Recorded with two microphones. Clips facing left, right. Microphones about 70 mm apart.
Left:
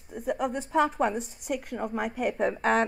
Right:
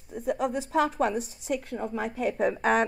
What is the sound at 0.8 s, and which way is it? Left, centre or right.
Speech, left.